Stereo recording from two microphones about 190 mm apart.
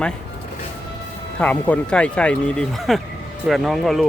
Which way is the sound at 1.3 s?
5° left (ahead or behind).